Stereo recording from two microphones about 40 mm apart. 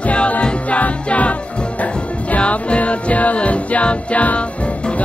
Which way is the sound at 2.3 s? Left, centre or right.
Left.